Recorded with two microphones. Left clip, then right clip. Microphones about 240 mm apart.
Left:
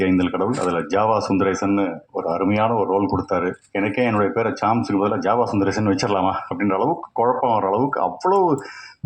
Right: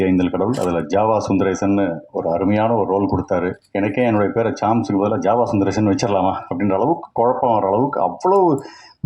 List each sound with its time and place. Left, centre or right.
0.0 s speech: right